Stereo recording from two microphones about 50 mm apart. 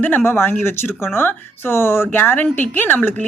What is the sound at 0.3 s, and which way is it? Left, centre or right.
A woman's voice, left.